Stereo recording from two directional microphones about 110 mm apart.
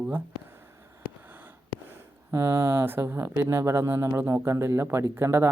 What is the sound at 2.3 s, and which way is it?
Speech, 25° right (ahead or behind).